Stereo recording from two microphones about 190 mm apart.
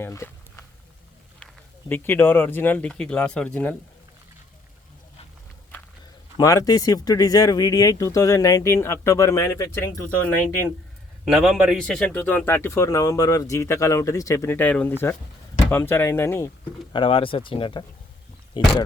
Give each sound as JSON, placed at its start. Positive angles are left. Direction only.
{"t": 0.0, "sound": "a sound", "side_deg": 15}
{"t": 1.9, "sound": "speech", "side_deg": 10}
{"t": 6.3, "sound": "speech", "side_deg": 20}
{"t": 11.3, "sound": "speech", "side_deg": -5}
{"t": 16.9, "sound": "speech", "side_deg": 25}